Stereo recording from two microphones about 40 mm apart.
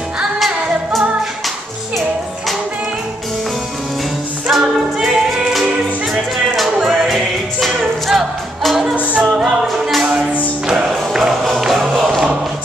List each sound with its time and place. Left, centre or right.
4.5 s a capella: centre
6.5 s music: centre
8.9 s music: right
9.3 s music: centre
9.7 s a capella: centre
10.7 s music: centre
11.4 s music: centre